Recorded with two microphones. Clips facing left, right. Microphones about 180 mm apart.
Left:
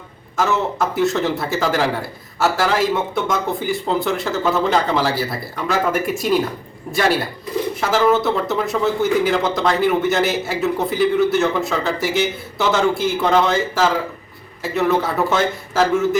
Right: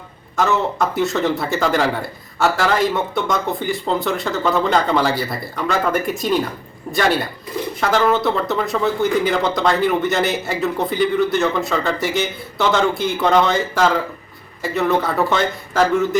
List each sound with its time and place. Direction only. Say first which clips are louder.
0.3 s speech: right 1 dB; 5° left (ahead or behind)
7.8 s speech: even; 5° left (ahead or behind)